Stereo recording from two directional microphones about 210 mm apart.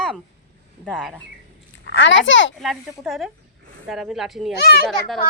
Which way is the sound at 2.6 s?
Centre (ahead or behind).